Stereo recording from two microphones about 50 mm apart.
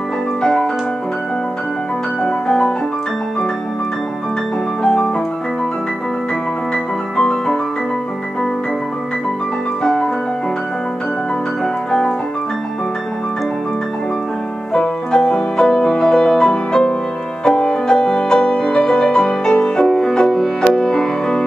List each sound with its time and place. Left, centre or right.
0.4 s music: centre
2.2 s music: centre
4.8 s music: centre
7.2 s music: centre
11.6 s piano: centre
14.7 s music: centre